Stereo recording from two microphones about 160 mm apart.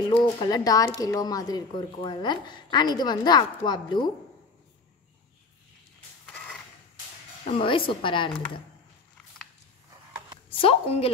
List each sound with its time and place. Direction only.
0.1 s speech: 30° left (ahead or behind)
6.3 s a sound: 5° left (ahead or behind)
7.4 s a woman's voice: 35° left (ahead or behind)
10.6 s a woman's voice: 35° left (ahead or behind)